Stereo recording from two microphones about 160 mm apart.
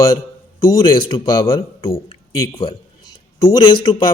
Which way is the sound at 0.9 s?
30° left (ahead or behind).